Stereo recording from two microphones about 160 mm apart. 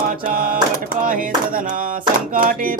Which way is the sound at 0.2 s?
60° right (ahead or behind).